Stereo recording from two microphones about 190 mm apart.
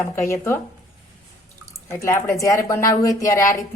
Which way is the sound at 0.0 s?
15° left (ahead or behind).